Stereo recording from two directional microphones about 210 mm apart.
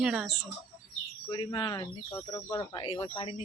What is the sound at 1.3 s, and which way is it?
Speech, 20° left (ahead or behind).